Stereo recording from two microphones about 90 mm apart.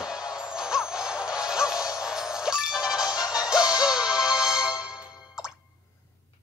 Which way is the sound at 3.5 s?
45° left (ahead or behind).